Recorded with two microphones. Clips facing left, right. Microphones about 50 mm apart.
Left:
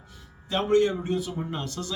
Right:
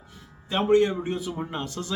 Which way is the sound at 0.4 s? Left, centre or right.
Centre.